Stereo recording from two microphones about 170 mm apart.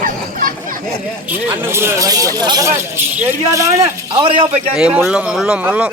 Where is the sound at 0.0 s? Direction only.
55° right (ahead or behind).